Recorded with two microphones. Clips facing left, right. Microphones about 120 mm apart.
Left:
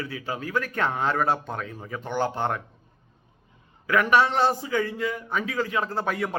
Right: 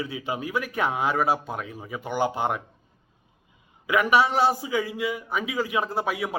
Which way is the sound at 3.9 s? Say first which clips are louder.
Even; 10° right (ahead or behind).